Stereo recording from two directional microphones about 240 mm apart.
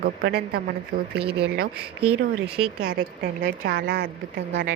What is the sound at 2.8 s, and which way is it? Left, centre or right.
A woman's voice, right.